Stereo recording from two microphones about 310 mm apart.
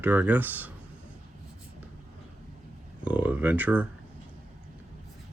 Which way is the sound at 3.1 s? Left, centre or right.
Centre.